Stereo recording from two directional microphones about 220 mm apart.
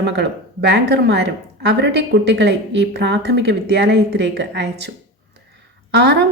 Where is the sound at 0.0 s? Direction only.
50° right (ahead or behind).